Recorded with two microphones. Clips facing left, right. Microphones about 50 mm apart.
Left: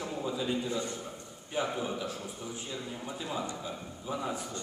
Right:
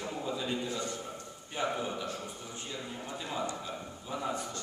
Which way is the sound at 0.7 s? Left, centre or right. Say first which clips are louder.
Left 2 dB; centre.